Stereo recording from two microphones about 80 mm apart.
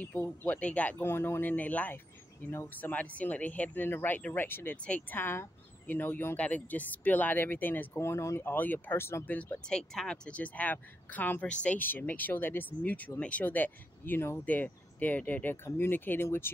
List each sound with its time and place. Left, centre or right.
0.0 s speech: left
0.9 s speech: left
2.5 s speech: left
2.9 s speech: centre
9.7 s speech: centre
15.5 s speech: left